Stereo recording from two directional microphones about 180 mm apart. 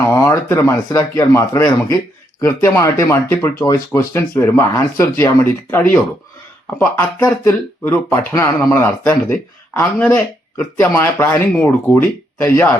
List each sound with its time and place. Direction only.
0.0 s speech: 15° left (ahead or behind)
7.3 s speech: 15° left (ahead or behind)